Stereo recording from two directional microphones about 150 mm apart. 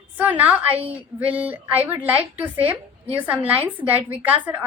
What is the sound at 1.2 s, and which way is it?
A woman's voice, 10° right (ahead or behind).